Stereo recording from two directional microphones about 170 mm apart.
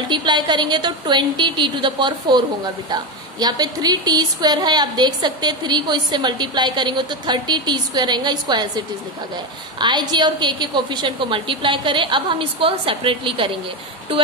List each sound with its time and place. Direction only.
0.1 s a woman's voice: 25° right (ahead or behind)